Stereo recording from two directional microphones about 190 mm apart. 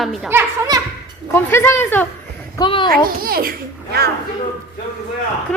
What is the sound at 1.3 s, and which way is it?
Speech, 10° left (ahead or behind).